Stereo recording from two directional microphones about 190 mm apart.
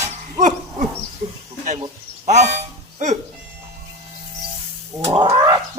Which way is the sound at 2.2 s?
35° right (ahead or behind).